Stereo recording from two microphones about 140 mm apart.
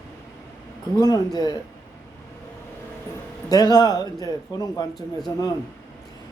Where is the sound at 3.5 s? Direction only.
30° left (ahead or behind).